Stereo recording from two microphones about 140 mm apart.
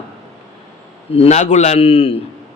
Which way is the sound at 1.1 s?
50° left (ahead or behind).